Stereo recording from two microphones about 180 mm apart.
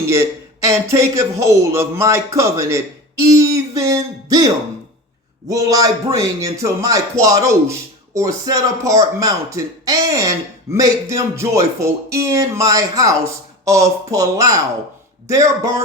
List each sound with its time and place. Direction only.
0.1 s a man's voice: 15° right (ahead or behind)